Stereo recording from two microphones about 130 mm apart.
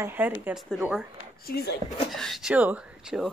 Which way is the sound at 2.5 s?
10° right (ahead or behind).